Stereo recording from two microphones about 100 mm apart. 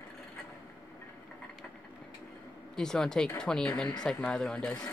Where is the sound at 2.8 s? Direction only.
5° left (ahead or behind).